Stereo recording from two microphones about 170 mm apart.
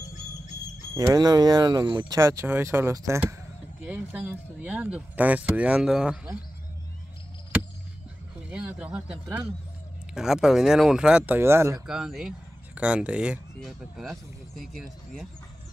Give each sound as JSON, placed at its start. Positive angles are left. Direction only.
{"t": 0.9, "sound": "speech", "side_deg": -20}
{"t": 8.5, "sound": "speech", "side_deg": -5}
{"t": 11.8, "sound": "speech", "side_deg": -5}